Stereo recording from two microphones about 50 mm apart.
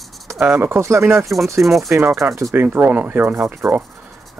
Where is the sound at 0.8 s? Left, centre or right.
Right.